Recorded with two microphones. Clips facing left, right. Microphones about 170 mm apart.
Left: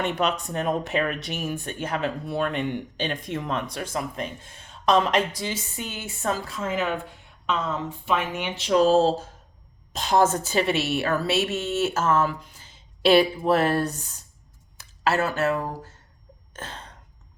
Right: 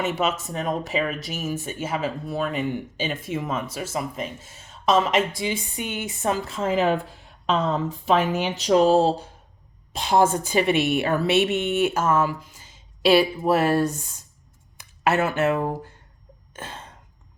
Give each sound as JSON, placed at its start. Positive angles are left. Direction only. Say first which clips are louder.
{"t": 0.0, "sound": "speech", "louder": "right 1 dB", "side_deg": -5}
{"t": 6.6, "sound": "speech", "louder": "right 5 dB", "side_deg": -30}
{"t": 8.8, "sound": "a woman's voice", "louder": "left 1 dB", "side_deg": -15}
{"t": 16.6, "sound": "a sound", "louder": "right 1 dB", "side_deg": -10}